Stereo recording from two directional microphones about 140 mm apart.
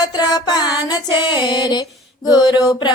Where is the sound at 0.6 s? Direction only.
30° left (ahead or behind).